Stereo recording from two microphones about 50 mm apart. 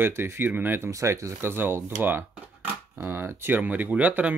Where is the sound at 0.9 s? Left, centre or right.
Right.